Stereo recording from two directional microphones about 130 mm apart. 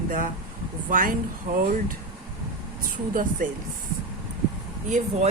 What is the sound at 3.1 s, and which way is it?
Speech, 90° right.